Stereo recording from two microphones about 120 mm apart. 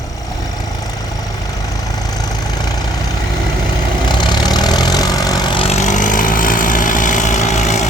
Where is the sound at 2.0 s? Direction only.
30° left (ahead or behind).